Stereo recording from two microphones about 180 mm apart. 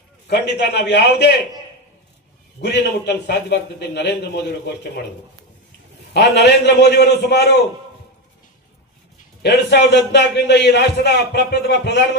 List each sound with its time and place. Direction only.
0.3 s a man's voice: 65° left (ahead or behind)
2.6 s a man's voice: 70° left (ahead or behind)
6.1 s a man's voice: 70° left (ahead or behind)
9.4 s a man's voice: 70° left (ahead or behind)